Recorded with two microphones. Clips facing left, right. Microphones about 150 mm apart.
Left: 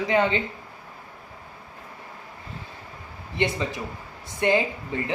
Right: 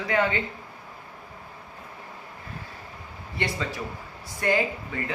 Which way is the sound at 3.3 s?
20° left (ahead or behind).